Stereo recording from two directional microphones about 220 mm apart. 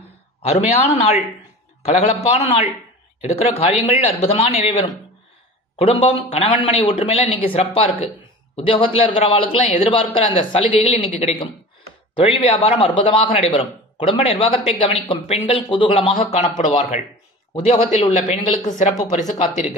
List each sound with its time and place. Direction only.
0.5 s a man's voice: 30° left (ahead or behind)